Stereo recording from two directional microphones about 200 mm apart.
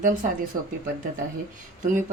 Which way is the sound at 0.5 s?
20° right (ahead or behind).